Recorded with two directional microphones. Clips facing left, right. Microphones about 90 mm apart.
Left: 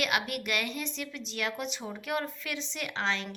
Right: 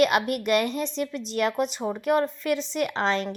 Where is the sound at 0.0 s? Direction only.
40° right (ahead or behind).